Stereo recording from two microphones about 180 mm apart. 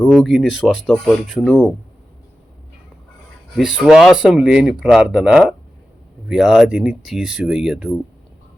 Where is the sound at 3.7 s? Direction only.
Centre (ahead or behind).